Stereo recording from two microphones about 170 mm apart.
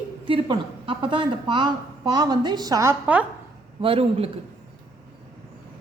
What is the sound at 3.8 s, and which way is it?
Speech, 35° right (ahead or behind).